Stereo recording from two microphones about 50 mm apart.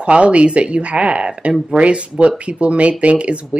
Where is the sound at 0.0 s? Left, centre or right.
Right.